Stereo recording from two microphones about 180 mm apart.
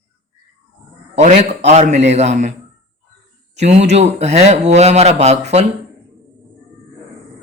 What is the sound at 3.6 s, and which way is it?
Speech, 40° right (ahead or behind).